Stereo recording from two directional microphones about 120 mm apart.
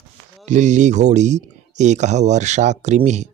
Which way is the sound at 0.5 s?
85° right.